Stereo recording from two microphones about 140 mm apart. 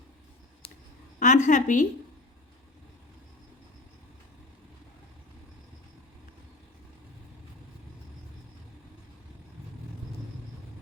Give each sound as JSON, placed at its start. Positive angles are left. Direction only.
{"t": 1.2, "sound": "a woman's voice", "side_deg": 65}